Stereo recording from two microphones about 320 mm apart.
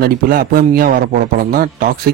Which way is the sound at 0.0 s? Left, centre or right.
Right.